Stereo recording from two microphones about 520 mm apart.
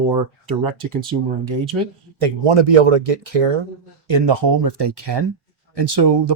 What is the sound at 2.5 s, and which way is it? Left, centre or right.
Speech, right.